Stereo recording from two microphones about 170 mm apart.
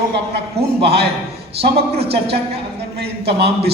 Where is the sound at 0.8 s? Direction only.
70° right (ahead or behind).